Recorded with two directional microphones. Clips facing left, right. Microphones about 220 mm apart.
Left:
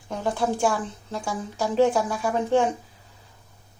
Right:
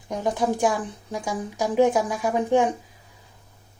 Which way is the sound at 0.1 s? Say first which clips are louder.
Right 1 dB; 15° right (ahead or behind).